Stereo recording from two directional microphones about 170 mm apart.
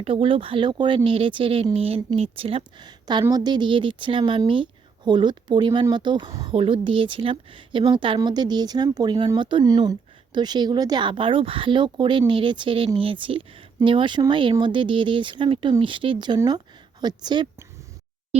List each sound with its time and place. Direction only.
0.0 s a woman's voice: 30° right (ahead or behind)